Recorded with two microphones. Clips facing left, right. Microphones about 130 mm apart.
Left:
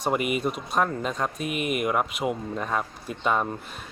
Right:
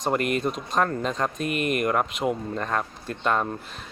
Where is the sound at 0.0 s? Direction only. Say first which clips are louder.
Right 1 dB; 5° left (ahead or behind).